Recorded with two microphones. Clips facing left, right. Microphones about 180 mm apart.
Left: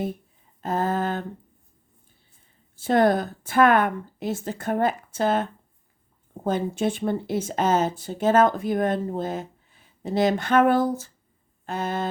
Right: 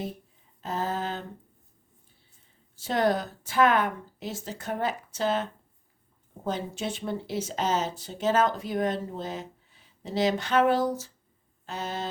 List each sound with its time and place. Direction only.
0.6 s speech: 50° left (ahead or behind)
2.7 s speech: 50° left (ahead or behind)